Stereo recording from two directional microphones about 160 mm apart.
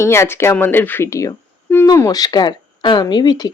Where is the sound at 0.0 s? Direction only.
15° left (ahead or behind).